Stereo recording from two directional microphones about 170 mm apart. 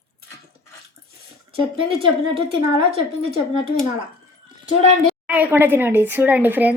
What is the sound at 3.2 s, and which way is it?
Speech, 35° right (ahead or behind).